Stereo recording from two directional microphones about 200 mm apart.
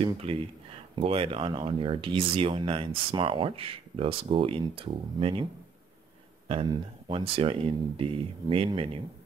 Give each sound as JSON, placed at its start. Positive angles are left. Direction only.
{"t": 0.0, "sound": "speech", "side_deg": -30}
{"t": 6.5, "sound": "speech", "side_deg": -25}